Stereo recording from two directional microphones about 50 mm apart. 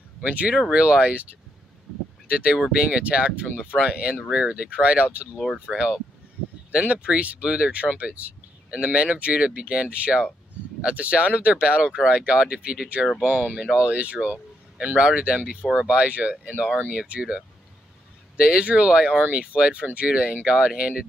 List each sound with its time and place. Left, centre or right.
0.2 s speech: right
5.7 s speech: centre
6.7 s speech: right